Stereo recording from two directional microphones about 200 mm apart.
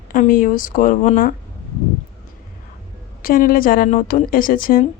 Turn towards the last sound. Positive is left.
turn(degrees=45)  # may be behind; listen again after turning